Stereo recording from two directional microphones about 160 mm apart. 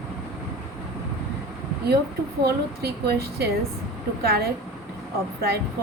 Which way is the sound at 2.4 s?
85° right.